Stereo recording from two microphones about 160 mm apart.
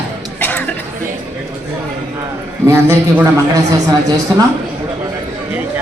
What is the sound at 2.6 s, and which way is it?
Speech, 15° right (ahead or behind).